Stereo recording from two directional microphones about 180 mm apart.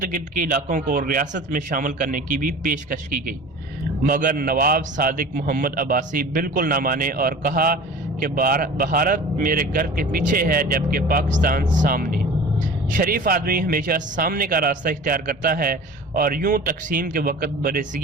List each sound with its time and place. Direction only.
0.0 s a man's voice: 45° right (ahead or behind)